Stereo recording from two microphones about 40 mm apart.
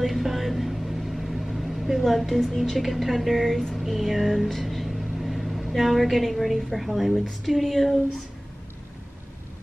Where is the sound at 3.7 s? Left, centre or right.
Centre.